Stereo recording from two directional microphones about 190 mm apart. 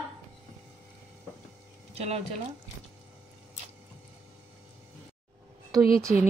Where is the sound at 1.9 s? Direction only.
35° right (ahead or behind).